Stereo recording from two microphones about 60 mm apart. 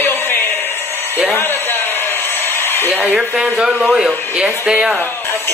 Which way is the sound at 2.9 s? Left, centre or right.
Centre.